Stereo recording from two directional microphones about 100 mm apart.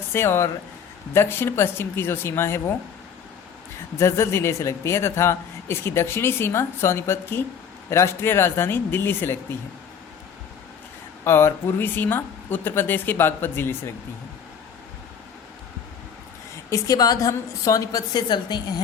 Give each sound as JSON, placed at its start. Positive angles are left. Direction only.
{"t": 0.1, "sound": "speech", "side_deg": 25}
{"t": 3.9, "sound": "speech", "side_deg": 25}
{"t": 11.2, "sound": "speech", "side_deg": 25}
{"t": 16.6, "sound": "a woman's voice", "side_deg": 35}